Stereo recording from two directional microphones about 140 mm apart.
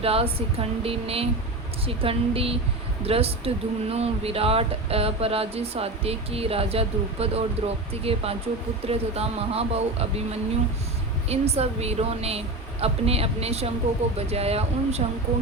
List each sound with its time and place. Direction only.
0.0 s speech: 45° right (ahead or behind)
11.3 s speech: 50° right (ahead or behind)